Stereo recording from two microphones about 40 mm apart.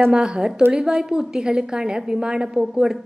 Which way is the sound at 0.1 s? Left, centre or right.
Centre.